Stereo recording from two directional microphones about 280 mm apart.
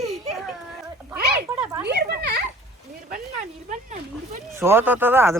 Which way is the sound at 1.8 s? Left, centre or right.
Right.